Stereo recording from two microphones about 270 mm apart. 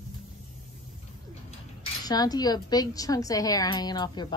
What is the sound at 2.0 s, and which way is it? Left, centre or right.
A woman's voice, centre.